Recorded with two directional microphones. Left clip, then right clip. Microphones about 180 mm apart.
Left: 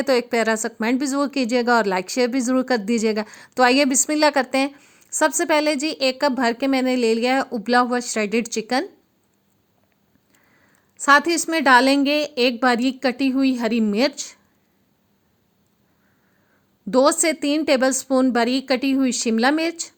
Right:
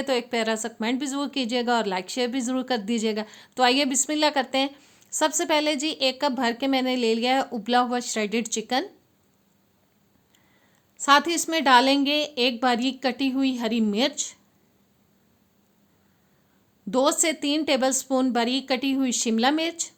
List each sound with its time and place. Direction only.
0.0 s speech: 30° left (ahead or behind)
10.9 s speech: 25° left (ahead or behind)
16.9 s speech: 25° left (ahead or behind)